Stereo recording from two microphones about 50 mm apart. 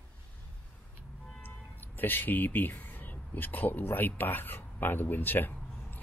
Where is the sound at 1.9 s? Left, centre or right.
Left.